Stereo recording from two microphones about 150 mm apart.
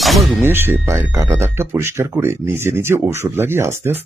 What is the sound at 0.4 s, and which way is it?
Speech, 15° right (ahead or behind).